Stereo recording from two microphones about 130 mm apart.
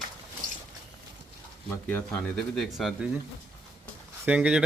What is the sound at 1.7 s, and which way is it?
Speech, 15° left (ahead or behind).